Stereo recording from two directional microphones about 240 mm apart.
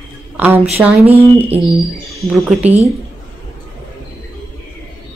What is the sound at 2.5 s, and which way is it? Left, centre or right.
Speech, right.